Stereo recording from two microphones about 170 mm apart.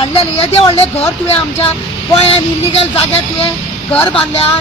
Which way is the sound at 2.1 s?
35° left (ahead or behind).